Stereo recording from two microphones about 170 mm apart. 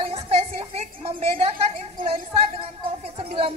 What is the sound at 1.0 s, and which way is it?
Speech, 35° right (ahead or behind).